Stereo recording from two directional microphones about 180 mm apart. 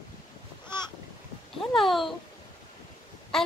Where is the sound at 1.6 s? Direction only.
Centre (ahead or behind).